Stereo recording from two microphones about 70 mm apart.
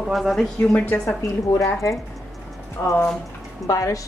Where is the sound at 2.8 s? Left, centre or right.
Left.